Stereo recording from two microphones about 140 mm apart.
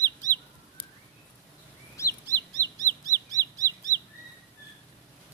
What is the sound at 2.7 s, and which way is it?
Bird, 25° right (ahead or behind).